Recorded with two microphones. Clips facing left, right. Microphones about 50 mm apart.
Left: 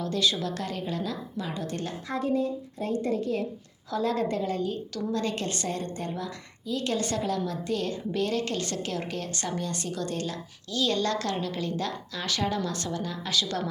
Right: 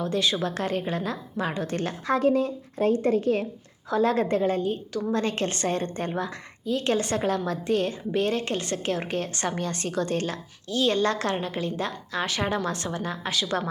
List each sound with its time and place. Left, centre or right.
0.0 s a woman's voice: right